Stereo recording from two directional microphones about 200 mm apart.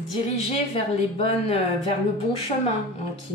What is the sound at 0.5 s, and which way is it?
Speech, 30° left (ahead or behind).